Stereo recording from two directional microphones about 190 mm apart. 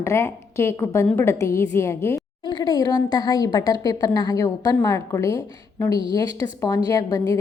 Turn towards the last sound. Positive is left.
turn(degrees=20)  # may be behind; listen again after turning